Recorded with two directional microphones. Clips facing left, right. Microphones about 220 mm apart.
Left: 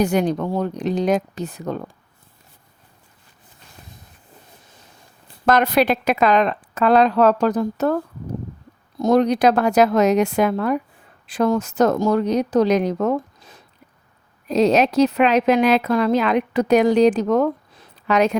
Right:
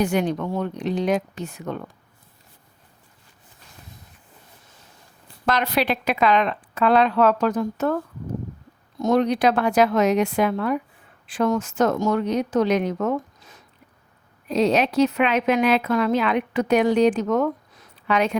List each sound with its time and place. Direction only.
0.0 s a woman's voice: 40° left (ahead or behind)
5.5 s a woman's voice: 45° left (ahead or behind)